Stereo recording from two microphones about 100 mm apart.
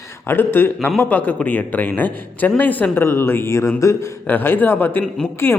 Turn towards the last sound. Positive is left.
turn(degrees=20)  # may be behind; listen again after turning